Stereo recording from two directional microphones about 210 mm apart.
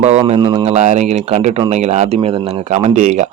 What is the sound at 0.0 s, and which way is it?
Speech, 30° right (ahead or behind).